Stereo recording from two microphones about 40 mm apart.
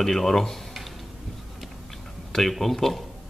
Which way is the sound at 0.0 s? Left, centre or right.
Centre.